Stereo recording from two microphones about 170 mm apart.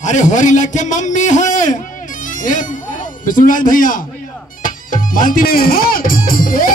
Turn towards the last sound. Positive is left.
turn(degrees=55)  # may be behind; listen again after turning